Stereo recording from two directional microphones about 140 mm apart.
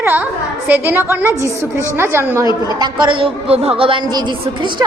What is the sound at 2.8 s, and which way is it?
A woman's voice, 35° right (ahead or behind).